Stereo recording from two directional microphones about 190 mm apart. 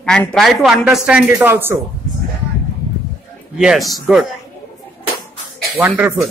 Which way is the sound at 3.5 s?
Centre (ahead or behind).